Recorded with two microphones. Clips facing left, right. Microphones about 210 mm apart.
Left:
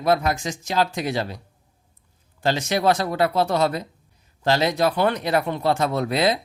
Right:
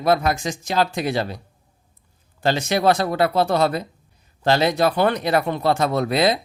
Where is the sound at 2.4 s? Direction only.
60° right (ahead or behind).